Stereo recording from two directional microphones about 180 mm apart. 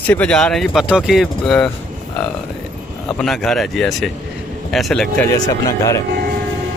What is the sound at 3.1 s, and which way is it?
Speech, centre (ahead or behind).